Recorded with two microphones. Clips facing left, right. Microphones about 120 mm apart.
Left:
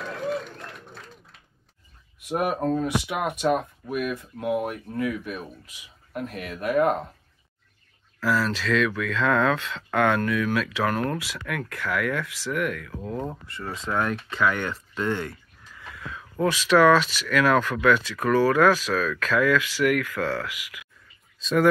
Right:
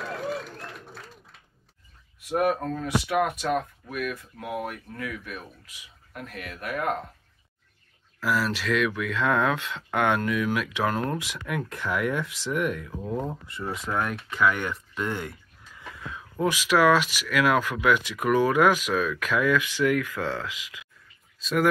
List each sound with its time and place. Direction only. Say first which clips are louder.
0.0 s applause: left 2 dB; centre (ahead or behind)
2.1 s speech: right 1 dB; 20° left (ahead or behind)
8.2 s speech: left 2 dB; 15° right (ahead or behind)
13.0 s speech: right 1 dB; 5° right (ahead or behind)
21.4 s speech: left 3 dB; 5° right (ahead or behind)